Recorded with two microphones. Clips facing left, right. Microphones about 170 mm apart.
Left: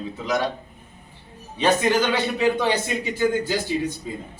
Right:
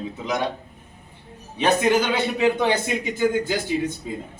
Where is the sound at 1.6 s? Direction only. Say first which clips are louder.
Right 1 dB; 15° right (ahead or behind).